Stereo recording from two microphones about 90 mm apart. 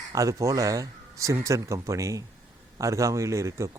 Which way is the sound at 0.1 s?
35° right (ahead or behind).